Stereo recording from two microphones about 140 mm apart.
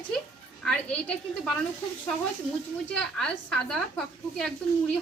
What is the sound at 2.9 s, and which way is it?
A woman's voice, 5° left (ahead or behind).